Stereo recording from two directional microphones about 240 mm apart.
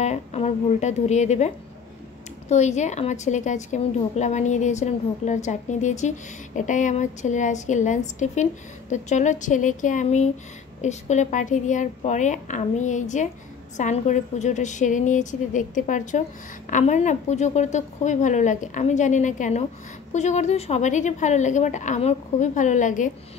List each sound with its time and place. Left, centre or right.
0.0 s a woman's voice: left
2.5 s a woman's voice: left